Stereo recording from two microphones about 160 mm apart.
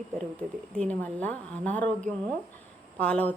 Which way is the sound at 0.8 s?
10° left (ahead or behind).